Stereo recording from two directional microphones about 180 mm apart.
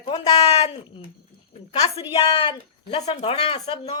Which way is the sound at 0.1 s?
35° left (ahead or behind).